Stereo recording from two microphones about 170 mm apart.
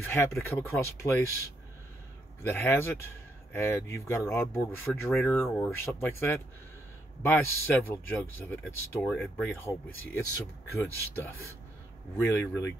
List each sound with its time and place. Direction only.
0.0 s speech: 15° left (ahead or behind)
2.4 s speech: 15° left (ahead or behind)